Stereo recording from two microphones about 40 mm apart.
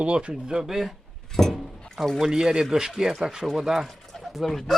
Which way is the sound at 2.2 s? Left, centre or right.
Centre.